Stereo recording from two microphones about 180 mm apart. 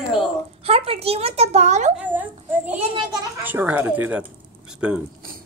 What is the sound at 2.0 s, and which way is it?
Speech, 10° right (ahead or behind).